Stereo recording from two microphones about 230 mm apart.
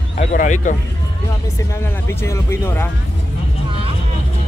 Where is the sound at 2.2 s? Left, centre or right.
Centre.